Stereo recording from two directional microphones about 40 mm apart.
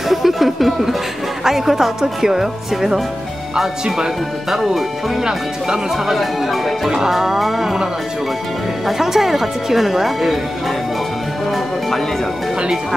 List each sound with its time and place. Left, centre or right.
0.1 s speech: centre
4.5 s speech: centre